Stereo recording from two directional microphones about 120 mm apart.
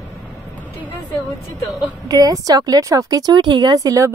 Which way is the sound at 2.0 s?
30° right (ahead or behind).